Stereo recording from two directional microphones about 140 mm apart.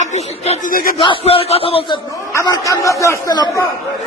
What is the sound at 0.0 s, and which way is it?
Speech, 55° left (ahead or behind).